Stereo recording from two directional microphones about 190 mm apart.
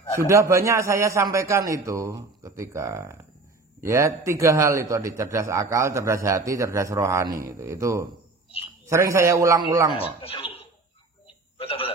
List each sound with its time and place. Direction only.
0.3 s a man's voice: 15° right (ahead or behind)
9.9 s speech: 30° left (ahead or behind)
11.5 s a sound: 30° left (ahead or behind)